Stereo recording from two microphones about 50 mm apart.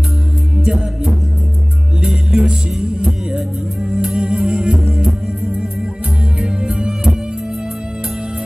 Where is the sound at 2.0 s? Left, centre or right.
Centre.